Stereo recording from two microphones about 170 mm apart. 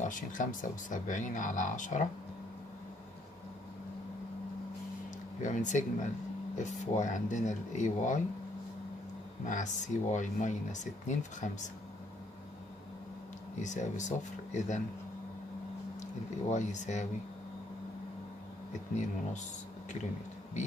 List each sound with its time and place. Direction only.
0.0 s speech: 50° left (ahead or behind)
5.4 s speech: 45° left (ahead or behind)
9.4 s speech: 45° left (ahead or behind)
13.6 s speech: 45° left (ahead or behind)
16.0 s speech: 45° left (ahead or behind)
18.7 s speech: 45° left (ahead or behind)